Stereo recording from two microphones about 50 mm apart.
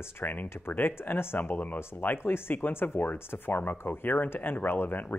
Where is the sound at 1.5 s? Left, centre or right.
Left.